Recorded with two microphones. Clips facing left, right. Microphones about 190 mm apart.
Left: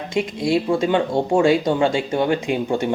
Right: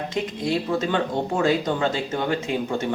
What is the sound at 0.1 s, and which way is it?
Speech, 15° left (ahead or behind).